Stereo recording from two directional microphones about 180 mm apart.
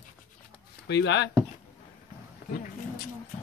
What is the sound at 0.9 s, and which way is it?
Speech, 70° left (ahead or behind).